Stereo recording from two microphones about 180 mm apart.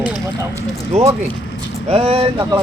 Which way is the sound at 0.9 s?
35° right (ahead or behind).